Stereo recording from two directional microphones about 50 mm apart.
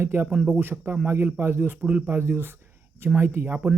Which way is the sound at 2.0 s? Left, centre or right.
Right.